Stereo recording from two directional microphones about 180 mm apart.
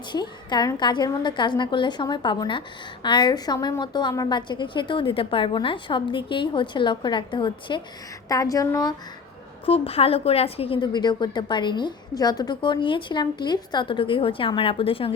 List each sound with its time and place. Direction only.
0.1 s a woman's voice: 25° left (ahead or behind)
9.6 s a woman's voice: 35° left (ahead or behind)